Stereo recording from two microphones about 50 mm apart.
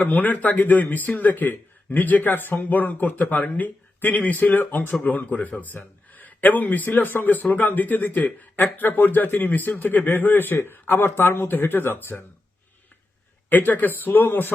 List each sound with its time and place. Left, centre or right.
0.0 s speech: left
13.5 s speech: left